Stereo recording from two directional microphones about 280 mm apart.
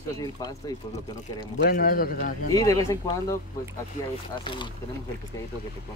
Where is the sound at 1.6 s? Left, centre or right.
Left.